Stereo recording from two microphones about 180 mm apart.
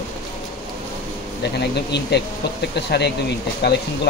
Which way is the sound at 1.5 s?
70° left (ahead or behind).